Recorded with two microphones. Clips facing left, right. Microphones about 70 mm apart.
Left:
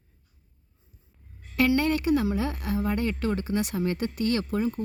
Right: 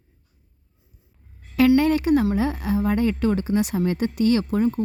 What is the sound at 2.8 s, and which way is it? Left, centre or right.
Speech, right.